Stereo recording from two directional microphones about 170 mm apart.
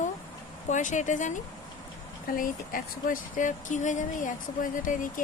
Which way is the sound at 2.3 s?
55° left (ahead or behind).